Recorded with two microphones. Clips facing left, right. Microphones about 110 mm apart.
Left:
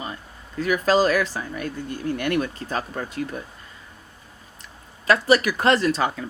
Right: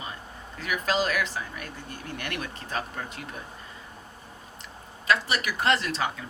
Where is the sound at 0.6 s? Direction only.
40° left (ahead or behind).